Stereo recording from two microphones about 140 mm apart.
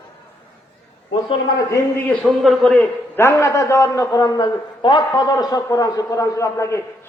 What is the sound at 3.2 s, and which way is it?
A man's voice, 20° left (ahead or behind).